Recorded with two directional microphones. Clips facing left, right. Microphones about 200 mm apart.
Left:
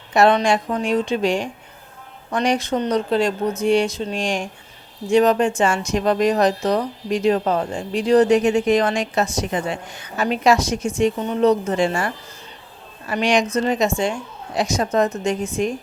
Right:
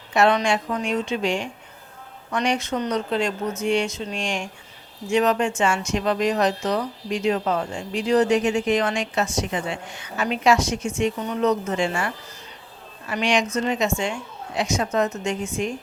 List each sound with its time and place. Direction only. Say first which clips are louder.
0.1 s speech: left 4 dB; 35° left (ahead or behind)